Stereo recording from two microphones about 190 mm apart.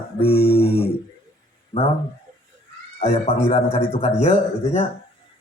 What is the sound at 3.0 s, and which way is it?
A man's voice, 30° left (ahead or behind).